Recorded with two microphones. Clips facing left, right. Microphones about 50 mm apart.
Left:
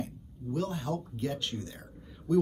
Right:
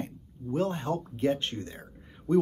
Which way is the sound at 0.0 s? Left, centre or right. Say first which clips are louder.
Right 1 dB; right.